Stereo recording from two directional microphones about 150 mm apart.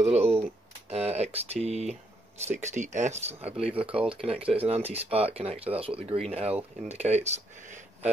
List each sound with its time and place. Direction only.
0.0 s speech: 45° right (ahead or behind)
0.4 s a sound: 45° right (ahead or behind)
2.4 s speech: 50° right (ahead or behind)